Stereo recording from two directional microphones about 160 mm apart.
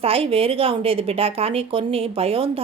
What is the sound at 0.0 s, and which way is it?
A woman's voice, 35° right (ahead or behind).